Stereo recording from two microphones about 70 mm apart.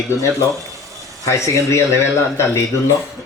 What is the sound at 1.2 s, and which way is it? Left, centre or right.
Speech, left.